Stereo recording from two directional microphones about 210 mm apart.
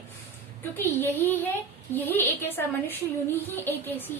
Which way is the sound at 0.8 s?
10° left (ahead or behind).